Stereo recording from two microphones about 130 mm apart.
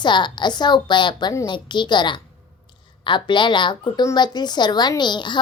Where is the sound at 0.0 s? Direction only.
35° left (ahead or behind).